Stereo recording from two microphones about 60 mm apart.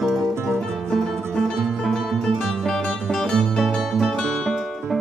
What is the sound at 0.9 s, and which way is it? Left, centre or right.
Music, centre.